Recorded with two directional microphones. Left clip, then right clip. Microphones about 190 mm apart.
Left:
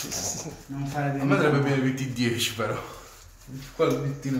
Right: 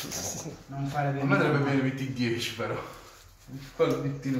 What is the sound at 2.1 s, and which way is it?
Speech, 45° left (ahead or behind).